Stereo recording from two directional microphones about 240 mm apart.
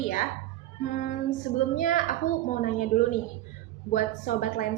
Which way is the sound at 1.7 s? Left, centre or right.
Left.